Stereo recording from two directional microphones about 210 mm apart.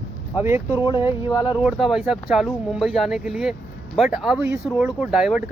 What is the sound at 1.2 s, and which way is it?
Speech, 20° left (ahead or behind).